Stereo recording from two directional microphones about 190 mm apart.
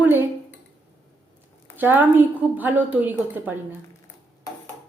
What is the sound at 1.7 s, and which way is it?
A woman's voice, 10° right (ahead or behind).